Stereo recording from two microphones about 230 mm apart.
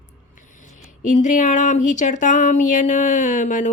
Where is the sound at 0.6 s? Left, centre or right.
Left.